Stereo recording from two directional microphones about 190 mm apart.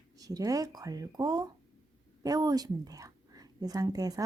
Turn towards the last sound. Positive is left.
turn(degrees=-20)  # may be behind; listen again after turning